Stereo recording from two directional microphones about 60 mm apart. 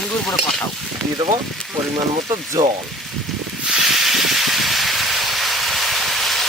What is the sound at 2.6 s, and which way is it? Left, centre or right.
Speech, right.